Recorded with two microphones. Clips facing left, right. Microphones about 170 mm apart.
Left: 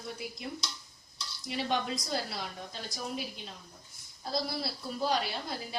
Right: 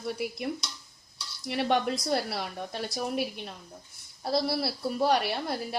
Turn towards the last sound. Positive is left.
turn(degrees=-65)  # may be behind; listen again after turning